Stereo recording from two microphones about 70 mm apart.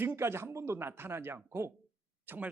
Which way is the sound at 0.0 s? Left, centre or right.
Right.